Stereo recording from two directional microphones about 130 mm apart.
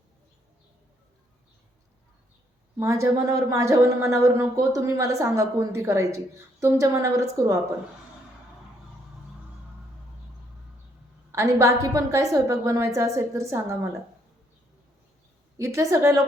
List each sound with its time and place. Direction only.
2.7 s a woman's voice: 20° right (ahead or behind)
11.3 s a woman's voice: 25° right (ahead or behind)
15.5 s a woman's voice: 20° right (ahead or behind)